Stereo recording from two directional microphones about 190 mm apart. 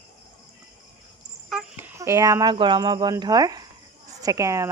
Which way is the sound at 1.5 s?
10° right (ahead or behind).